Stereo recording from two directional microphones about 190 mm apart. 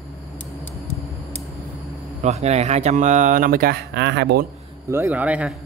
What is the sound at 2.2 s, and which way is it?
Speech, 35° right (ahead or behind).